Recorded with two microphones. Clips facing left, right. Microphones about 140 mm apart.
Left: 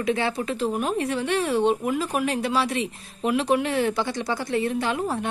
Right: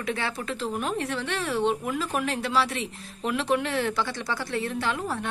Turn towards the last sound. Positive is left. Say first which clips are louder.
# left 4 dB
turn(degrees=20)  # may be behind; listen again after turning